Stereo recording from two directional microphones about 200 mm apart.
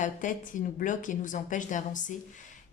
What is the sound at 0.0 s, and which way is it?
A woman's voice, 40° left (ahead or behind).